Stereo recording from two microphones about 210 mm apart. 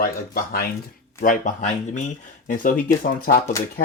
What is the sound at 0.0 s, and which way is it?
Speech, 45° left (ahead or behind).